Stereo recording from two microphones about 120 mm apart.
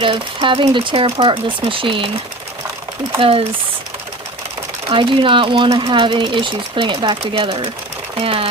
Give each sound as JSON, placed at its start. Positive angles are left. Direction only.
{"t": 0.0, "sound": "speech", "side_deg": -45}
{"t": 3.2, "sound": "speech", "side_deg": -50}
{"t": 4.9, "sound": "speech", "side_deg": -45}